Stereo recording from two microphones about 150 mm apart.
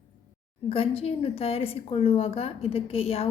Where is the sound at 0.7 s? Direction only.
40° left (ahead or behind).